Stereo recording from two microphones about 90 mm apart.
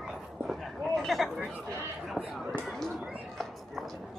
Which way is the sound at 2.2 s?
15° right (ahead or behind).